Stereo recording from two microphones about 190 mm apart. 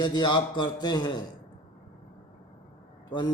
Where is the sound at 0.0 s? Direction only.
25° left (ahead or behind).